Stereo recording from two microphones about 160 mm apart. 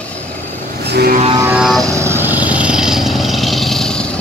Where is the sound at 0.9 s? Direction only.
90° right.